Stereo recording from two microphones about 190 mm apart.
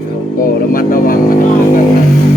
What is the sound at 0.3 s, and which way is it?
Music, 50° left (ahead or behind).